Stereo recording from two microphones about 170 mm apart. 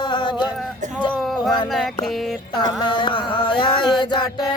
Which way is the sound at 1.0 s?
25° left (ahead or behind).